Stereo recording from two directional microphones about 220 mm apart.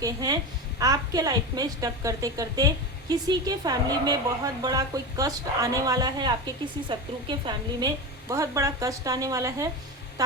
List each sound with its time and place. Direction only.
0.0 s a woman's voice: 15° right (ahead or behind)